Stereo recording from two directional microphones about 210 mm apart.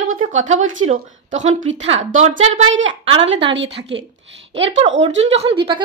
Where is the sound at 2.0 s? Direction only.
35° right (ahead or behind).